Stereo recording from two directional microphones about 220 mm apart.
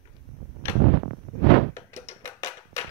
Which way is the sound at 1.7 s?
10° left (ahead or behind).